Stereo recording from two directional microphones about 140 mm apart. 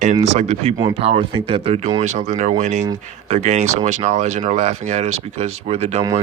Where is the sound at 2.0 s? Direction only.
55° right (ahead or behind).